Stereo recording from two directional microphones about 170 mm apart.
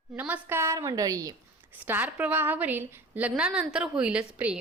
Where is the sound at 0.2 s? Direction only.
10° right (ahead or behind).